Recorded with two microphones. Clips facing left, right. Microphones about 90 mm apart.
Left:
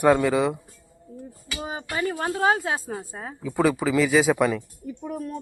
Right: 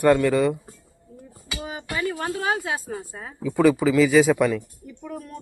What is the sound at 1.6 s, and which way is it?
Speech, 30° left (ahead or behind).